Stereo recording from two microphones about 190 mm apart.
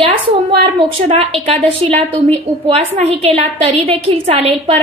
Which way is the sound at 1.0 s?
30° right (ahead or behind).